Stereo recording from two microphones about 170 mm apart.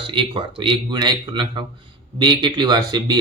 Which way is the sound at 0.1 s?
30° right (ahead or behind).